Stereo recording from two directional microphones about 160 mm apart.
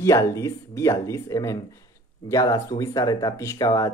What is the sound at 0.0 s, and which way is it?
Speech, 20° left (ahead or behind).